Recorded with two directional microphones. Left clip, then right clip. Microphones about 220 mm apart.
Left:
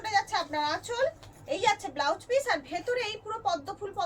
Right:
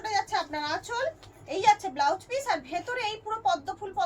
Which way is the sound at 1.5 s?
10° left (ahead or behind).